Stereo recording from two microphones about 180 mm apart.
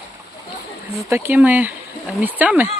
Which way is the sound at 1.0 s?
15° right (ahead or behind).